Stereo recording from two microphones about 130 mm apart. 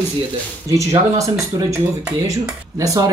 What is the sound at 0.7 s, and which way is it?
Speech, 25° right (ahead or behind).